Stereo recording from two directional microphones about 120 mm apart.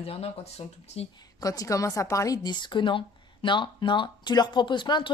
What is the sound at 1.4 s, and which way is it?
Speech, 30° left (ahead or behind).